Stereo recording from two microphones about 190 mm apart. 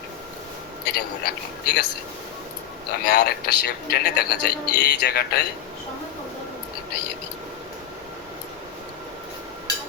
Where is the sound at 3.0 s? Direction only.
60° left (ahead or behind).